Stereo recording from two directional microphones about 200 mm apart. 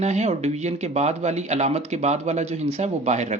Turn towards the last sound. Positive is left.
turn(degrees=-35)  # may be behind; listen again after turning